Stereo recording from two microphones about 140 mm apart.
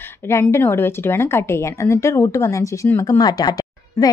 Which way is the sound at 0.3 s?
20° left (ahead or behind).